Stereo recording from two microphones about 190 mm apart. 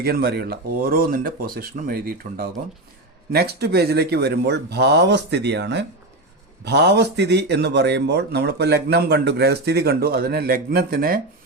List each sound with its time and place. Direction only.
0.0 s speech: 55° right (ahead or behind)